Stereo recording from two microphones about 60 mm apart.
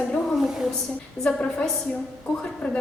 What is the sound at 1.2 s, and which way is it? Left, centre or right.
A woman's voice, left.